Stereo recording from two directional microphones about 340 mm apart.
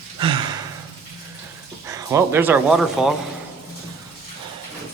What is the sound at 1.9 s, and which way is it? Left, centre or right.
Speech, centre.